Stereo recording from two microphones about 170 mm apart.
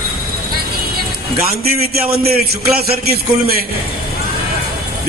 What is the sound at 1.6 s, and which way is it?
A man's voice, 65° right (ahead or behind).